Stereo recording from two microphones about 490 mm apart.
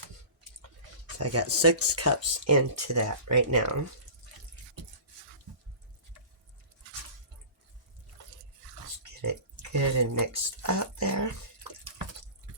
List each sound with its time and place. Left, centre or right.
1.2 s speech: right
9.7 s speech: right